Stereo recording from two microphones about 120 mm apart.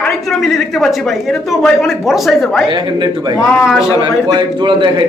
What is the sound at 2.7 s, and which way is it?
A man's voice, 40° right (ahead or behind).